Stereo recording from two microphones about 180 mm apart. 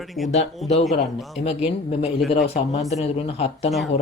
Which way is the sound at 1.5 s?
35° left (ahead or behind).